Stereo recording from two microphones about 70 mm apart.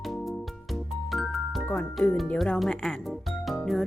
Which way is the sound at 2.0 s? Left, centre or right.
Centre.